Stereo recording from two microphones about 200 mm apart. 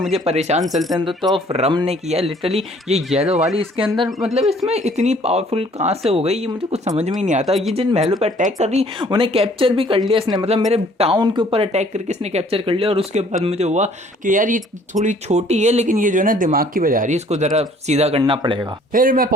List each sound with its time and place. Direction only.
0.1 s speech: 30° right (ahead or behind)
0.9 s speech: 20° right (ahead or behind)
1.5 s speech: 30° right (ahead or behind)
3.1 s speech: centre (ahead or behind)
3.8 s speech: 25° right (ahead or behind)
18.9 s speech: 45° right (ahead or behind)